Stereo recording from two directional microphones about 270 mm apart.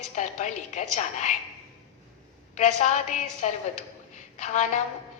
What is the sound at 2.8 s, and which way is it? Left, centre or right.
A woman's voice, left.